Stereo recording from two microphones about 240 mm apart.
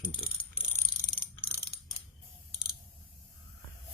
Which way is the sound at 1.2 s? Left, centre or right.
Left.